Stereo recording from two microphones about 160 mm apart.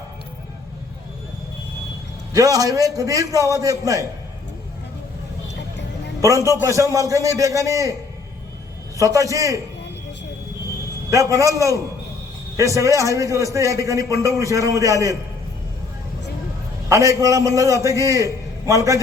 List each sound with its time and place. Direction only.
2.3 s a man's voice: 20° right (ahead or behind)
6.2 s a man's voice: 20° right (ahead or behind)
9.0 s a man's voice: 20° right (ahead or behind)
11.1 s a man's voice: 20° right (ahead or behind)
16.9 s a man's voice: 20° right (ahead or behind)